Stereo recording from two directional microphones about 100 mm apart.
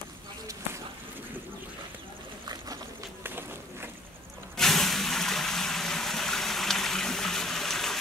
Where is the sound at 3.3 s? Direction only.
20° right (ahead or behind).